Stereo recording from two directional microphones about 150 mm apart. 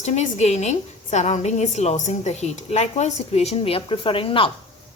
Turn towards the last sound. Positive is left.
turn(degrees=35)  # may be behind; listen again after turning